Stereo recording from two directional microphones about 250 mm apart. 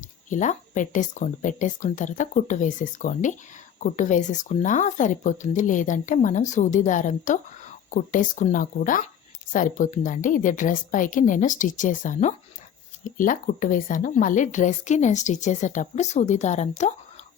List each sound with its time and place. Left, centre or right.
0.3 s a woman's voice: left